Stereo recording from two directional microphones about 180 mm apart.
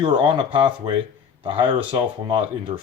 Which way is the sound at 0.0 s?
25° right (ahead or behind).